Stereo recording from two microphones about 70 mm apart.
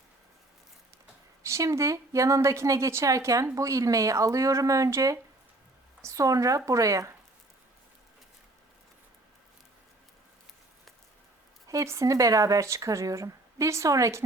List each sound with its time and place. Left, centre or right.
1.4 s a woman's voice: right
11.7 s a woman's voice: right